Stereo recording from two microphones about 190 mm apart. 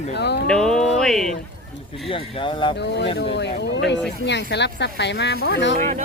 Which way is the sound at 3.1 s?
65° left (ahead or behind).